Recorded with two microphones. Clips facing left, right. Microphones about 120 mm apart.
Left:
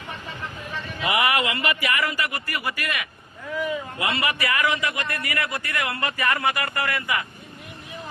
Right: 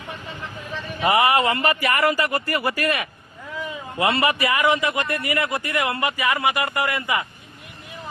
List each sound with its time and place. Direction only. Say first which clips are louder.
1.0 s a man's voice: right 5 dB; 35° right (ahead or behind)